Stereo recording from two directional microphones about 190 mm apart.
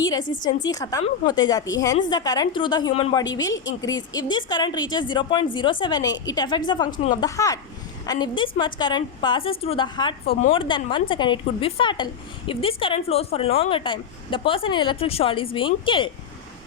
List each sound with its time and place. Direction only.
0.0 s speech: 20° left (ahead or behind)
0.3 s a woman's voice: 45° left (ahead or behind)
0.6 s speech: 20° left (ahead or behind)